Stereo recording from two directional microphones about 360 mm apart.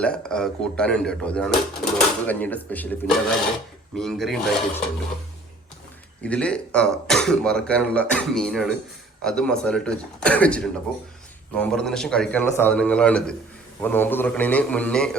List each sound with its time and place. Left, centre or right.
0.0 s speech: centre
6.2 s speech: centre